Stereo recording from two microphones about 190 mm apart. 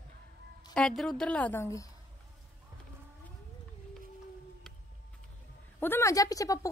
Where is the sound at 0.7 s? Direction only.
5° left (ahead or behind).